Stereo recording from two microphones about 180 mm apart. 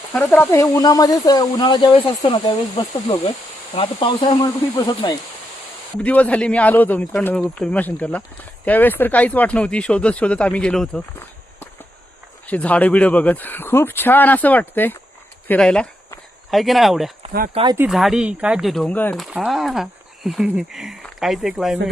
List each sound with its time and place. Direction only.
0.1 s speech: 10° left (ahead or behind)
6.0 s speech: 5° left (ahead or behind)
12.5 s speech: 10° left (ahead or behind)
17.5 s speech: 30° right (ahead or behind)
17.7 s speech: centre (ahead or behind)